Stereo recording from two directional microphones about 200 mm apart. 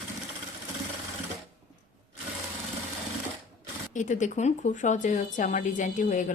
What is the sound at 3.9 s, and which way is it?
Speech, 40° left (ahead or behind).